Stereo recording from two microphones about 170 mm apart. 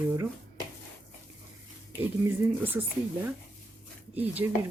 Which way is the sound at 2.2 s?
10° right (ahead or behind).